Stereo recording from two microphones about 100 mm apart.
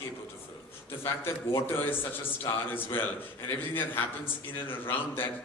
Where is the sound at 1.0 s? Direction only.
25° left (ahead or behind).